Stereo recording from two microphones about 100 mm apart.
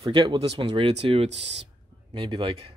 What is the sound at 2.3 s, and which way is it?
Speech, 55° right (ahead or behind).